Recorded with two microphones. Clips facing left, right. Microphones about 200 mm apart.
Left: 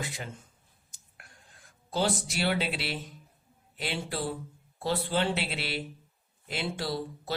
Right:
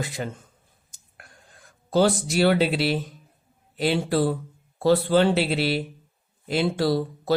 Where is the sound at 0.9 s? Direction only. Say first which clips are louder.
Right 6 dB; 45° right (ahead or behind).